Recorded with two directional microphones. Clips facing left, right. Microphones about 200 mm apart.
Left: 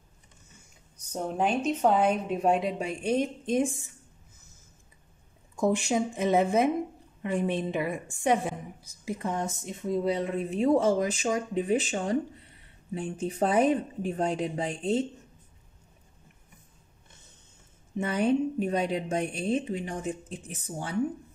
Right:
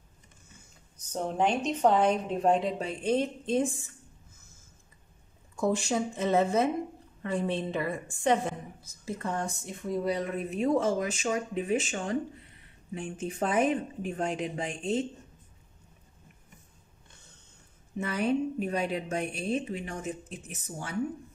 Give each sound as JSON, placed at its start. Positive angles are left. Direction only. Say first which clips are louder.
{"t": 1.1, "sound": "a woman's voice", "louder": "even", "side_deg": 5}
{"t": 5.6, "sound": "a woman's voice", "louder": "left 2 dB", "side_deg": 15}
{"t": 17.9, "sound": "a woman's voice", "louder": "left 3 dB", "side_deg": 30}